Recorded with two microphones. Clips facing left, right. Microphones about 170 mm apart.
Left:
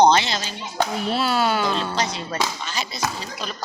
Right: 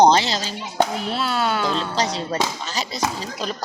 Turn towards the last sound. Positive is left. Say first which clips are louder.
# right 3 dB
turn(degrees=-35)  # may be behind; listen again after turning